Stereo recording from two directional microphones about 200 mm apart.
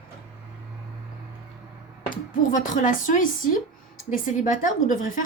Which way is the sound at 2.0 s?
40° left (ahead or behind).